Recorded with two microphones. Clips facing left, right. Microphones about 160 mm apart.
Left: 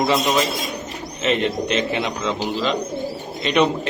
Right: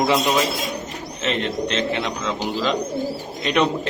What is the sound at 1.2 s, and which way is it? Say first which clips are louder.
Speech: left 3 dB; 5° left (ahead or behind).